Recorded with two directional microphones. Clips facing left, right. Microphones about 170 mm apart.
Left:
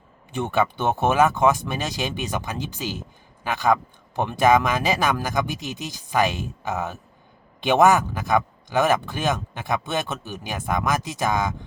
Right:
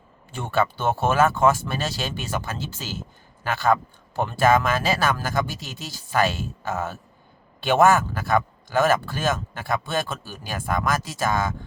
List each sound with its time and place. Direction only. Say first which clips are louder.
0.3 s speech: left 1 dB; 15° left (ahead or behind)